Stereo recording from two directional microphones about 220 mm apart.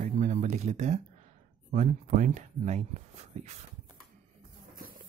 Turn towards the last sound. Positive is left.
turn(degrees=-30)  # may be behind; listen again after turning